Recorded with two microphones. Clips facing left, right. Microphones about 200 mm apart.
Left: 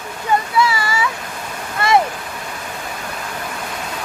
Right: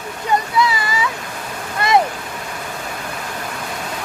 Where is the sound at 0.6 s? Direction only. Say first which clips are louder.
Left 1 dB; 20° right (ahead or behind).